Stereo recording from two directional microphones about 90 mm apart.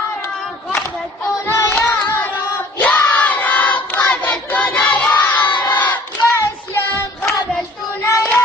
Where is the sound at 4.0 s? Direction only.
30° left (ahead or behind).